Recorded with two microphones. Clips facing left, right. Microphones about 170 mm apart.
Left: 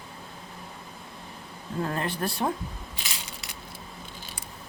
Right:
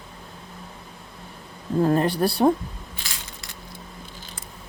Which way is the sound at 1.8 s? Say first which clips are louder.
Right 9 dB; 35° right (ahead or behind).